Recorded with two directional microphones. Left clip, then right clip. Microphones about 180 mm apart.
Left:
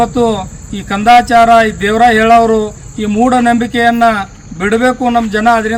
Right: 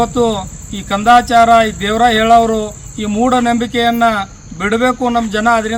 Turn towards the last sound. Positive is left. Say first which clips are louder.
# left 3 dB
turn(degrees=20)  # may be behind; listen again after turning